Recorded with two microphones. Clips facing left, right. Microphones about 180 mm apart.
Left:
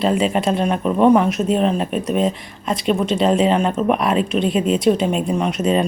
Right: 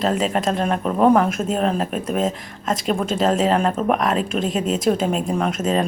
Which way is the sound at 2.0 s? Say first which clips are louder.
Left 3 dB; 45° right (ahead or behind).